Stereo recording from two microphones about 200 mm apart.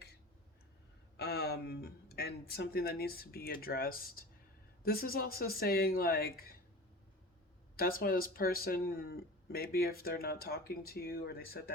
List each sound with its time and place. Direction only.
1.1 s a sound: 55° left (ahead or behind)
4.8 s speech: 50° left (ahead or behind)
7.8 s speech: 45° left (ahead or behind)